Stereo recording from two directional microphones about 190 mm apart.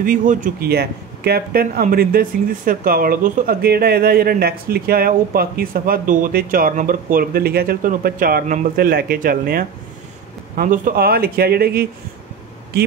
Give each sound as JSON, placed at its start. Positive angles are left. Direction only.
{"t": 0.0, "sound": "speech", "side_deg": -45}